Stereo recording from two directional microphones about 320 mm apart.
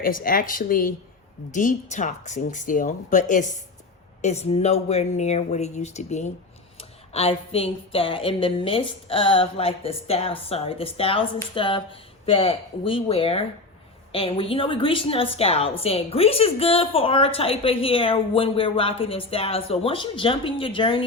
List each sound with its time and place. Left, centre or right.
0.0 s a woman's voice: left